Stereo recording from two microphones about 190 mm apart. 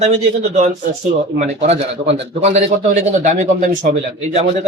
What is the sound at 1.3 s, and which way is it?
Speech, 35° right (ahead or behind).